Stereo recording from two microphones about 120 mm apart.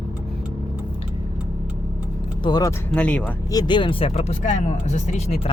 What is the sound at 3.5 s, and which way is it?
Speech, 35° left (ahead or behind).